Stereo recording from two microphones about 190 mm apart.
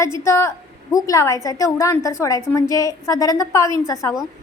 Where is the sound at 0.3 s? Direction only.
15° left (ahead or behind).